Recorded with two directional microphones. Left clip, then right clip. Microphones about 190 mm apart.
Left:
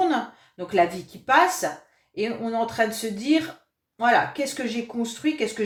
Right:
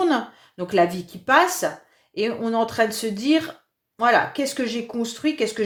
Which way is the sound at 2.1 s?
50° right (ahead or behind).